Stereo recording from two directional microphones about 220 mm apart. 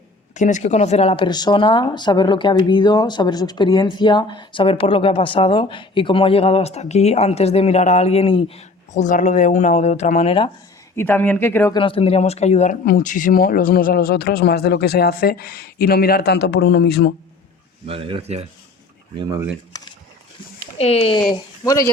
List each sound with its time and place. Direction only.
0.3 s speech: 35° left (ahead or behind)
10.9 s speech: 10° left (ahead or behind)
11.8 s speech: 25° left (ahead or behind); by 17.2 s 50° left (ahead or behind)
17.8 s speech: 25° right (ahead or behind)
19.1 s speech: 15° right (ahead or behind)
19.7 s a sound: 15° left (ahead or behind)
20.7 s speech: 30° left (ahead or behind)
21.6 s speech: 15° left (ahead or behind)